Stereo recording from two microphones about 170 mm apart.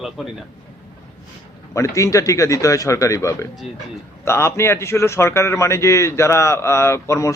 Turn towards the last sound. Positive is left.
turn(degrees=15)  # may be behind; listen again after turning